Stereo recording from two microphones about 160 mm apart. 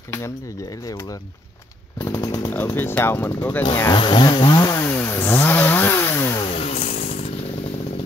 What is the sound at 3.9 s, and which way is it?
Chainsaw, 30° left (ahead or behind).